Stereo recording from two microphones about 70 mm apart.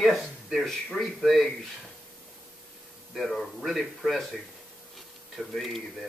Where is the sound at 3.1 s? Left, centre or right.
Centre.